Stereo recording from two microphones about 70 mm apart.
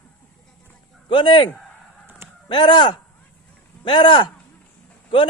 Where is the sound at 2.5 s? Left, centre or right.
Left.